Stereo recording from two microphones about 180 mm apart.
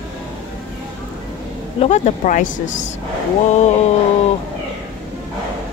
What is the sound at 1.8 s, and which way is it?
Speech, 40° left (ahead or behind).